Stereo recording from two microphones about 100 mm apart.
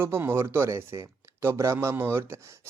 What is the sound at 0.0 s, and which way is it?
Speech, 25° right (ahead or behind).